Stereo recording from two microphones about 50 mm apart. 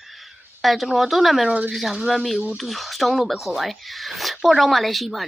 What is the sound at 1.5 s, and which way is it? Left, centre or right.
Speech, right.